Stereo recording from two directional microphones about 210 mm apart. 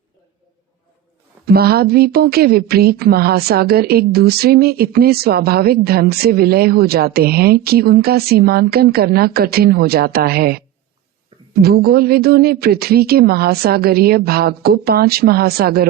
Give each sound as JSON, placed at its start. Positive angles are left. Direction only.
{"t": 1.5, "sound": "a woman's voice", "side_deg": -45}
{"t": 11.6, "sound": "a woman's voice", "side_deg": -45}